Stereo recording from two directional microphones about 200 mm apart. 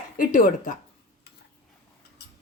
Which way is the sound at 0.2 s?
40° left (ahead or behind).